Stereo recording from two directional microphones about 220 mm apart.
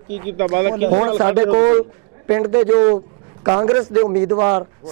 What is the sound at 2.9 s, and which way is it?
A man's voice, 25° right (ahead or behind).